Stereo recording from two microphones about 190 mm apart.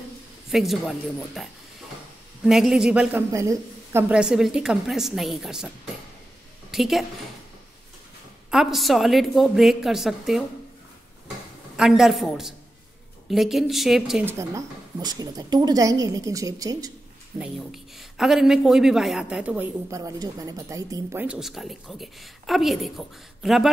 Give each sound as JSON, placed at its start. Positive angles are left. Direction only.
{"t": 0.5, "sound": "a woman's voice", "side_deg": 0}
{"t": 6.7, "sound": "a woman's voice", "side_deg": 0}
{"t": 8.5, "sound": "a woman's voice", "side_deg": 0}
{"t": 11.7, "sound": "a woman's voice", "side_deg": 0}
{"t": 14.5, "sound": "a woman's voice", "side_deg": -20}
{"t": 17.4, "sound": "a woman's voice", "side_deg": 0}